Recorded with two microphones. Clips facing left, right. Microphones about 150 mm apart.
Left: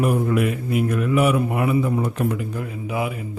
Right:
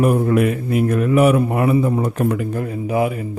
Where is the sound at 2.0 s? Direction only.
50° right (ahead or behind).